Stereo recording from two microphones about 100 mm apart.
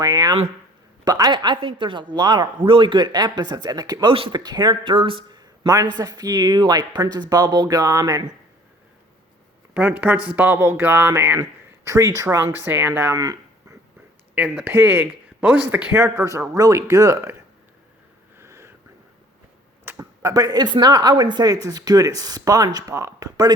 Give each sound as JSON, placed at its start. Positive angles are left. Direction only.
{"t": 0.0, "sound": "speech", "side_deg": -40}
{"t": 4.1, "sound": "speech", "side_deg": -65}
{"t": 4.4, "sound": "speech", "side_deg": -45}
{"t": 5.4, "sound": "a sound", "side_deg": -40}
{"t": 6.0, "sound": "speech", "side_deg": -40}
{"t": 9.7, "sound": "speech", "side_deg": -15}
{"t": 11.9, "sound": "speech", "side_deg": -35}
{"t": 13.1, "sound": "a sound", "side_deg": -40}
{"t": 14.3, "sound": "speech", "side_deg": -10}
{"t": 18.3, "sound": "a sound", "side_deg": -25}
{"t": 19.8, "sound": "speech", "side_deg": -25}